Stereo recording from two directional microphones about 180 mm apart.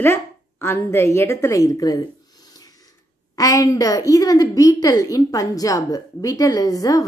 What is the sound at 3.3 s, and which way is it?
A woman's voice, 20° left (ahead or behind).